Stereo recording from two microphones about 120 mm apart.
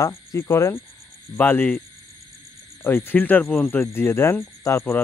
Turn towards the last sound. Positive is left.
turn(degrees=20)  # may be behind; listen again after turning